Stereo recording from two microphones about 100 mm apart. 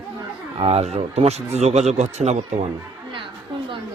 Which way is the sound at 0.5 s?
80° right.